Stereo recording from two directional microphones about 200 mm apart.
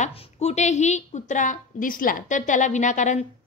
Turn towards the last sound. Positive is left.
turn(degrees=40)  # may be behind; listen again after turning